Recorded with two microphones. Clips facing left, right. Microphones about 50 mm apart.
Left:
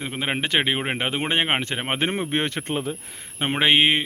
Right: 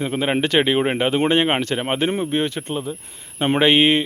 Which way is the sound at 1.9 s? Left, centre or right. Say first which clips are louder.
Right 2 dB; left.